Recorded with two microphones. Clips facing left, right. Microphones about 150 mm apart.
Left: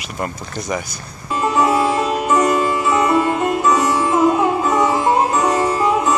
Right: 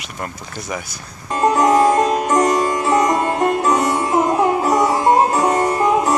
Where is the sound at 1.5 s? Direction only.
40° right (ahead or behind).